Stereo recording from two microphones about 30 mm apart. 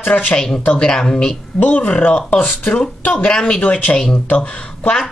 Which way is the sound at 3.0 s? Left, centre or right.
Left.